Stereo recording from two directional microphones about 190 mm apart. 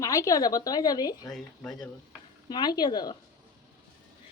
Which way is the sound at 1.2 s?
Centre (ahead or behind).